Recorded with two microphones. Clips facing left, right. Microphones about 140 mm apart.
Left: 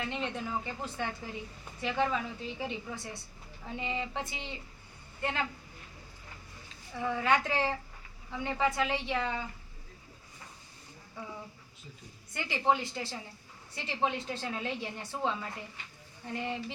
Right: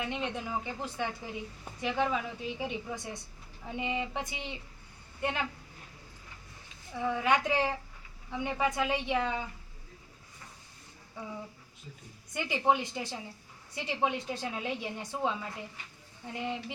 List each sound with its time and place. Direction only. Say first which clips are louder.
0.0 s a woman's voice: right 1 dB; 15° right (ahead or behind)
6.9 s a woman's voice: right 1 dB; 10° right (ahead or behind)
12.3 s a woman's voice: right 1 dB; 15° right (ahead or behind)